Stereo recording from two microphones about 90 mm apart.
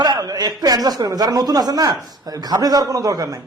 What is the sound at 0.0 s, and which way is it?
A man's voice, 45° right (ahead or behind).